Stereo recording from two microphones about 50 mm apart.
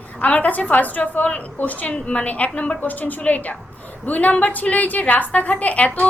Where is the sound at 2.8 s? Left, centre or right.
Left.